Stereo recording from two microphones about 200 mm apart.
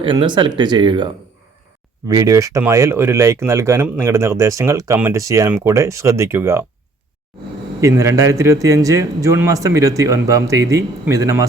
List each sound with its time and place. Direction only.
0.0 s speech: 25° right (ahead or behind)
7.8 s speech: 15° right (ahead or behind)